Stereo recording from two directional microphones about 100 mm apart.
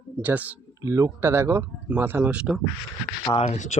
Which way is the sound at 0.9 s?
35° right (ahead or behind).